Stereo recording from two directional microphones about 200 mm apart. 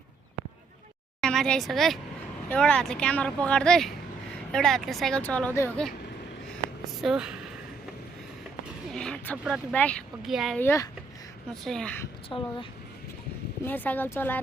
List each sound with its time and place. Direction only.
1.2 s speech: 5° left (ahead or behind)
6.5 s a sound: centre (ahead or behind)
8.9 s speech: 5° left (ahead or behind)
10.6 s speech: 10° left (ahead or behind)
12.3 s speech: 20° left (ahead or behind)
13.7 s speech: 10° left (ahead or behind)